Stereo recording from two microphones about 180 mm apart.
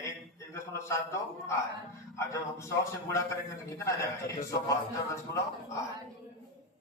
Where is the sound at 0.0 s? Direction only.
15° left (ahead or behind).